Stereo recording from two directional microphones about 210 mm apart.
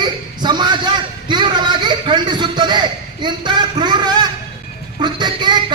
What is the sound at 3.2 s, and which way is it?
A man's voice, 20° right (ahead or behind).